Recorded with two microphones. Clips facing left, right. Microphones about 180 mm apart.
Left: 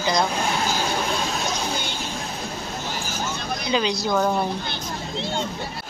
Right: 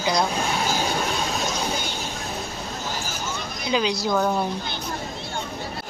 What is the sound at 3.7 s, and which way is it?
Speech, 5° right (ahead or behind).